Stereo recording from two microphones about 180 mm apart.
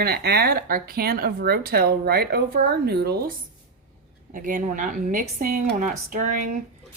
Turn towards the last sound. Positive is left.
turn(degrees=-50)  # may be behind; listen again after turning